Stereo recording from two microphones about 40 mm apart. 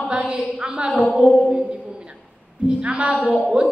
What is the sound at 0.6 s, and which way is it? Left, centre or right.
Music, right.